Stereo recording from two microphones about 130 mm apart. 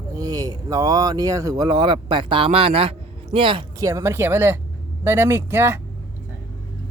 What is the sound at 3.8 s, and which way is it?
Speech, 25° right (ahead or behind).